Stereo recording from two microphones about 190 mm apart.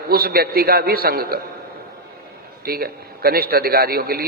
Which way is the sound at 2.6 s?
55° right (ahead or behind).